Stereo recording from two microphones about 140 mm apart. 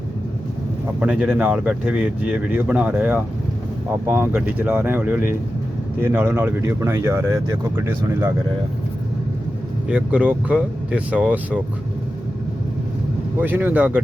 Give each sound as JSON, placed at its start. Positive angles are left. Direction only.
{"t": 0.9, "sound": "speech", "side_deg": -10}
{"t": 9.9, "sound": "speech", "side_deg": -10}
{"t": 13.4, "sound": "speech", "side_deg": -15}